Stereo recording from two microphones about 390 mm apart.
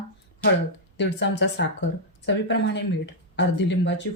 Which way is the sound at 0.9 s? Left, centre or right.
Left.